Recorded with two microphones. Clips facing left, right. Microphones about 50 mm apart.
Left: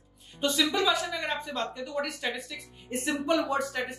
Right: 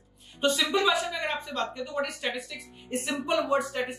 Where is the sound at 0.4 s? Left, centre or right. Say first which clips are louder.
Right 2 dB; right.